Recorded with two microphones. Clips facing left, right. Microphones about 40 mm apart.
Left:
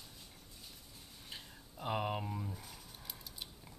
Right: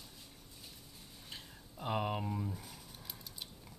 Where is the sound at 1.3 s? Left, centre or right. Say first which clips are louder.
Even; centre.